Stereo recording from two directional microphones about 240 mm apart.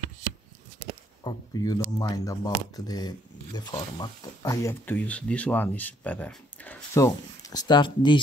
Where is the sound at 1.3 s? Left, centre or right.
Centre.